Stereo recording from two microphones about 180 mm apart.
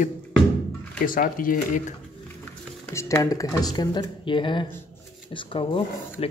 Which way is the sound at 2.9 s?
15° left (ahead or behind).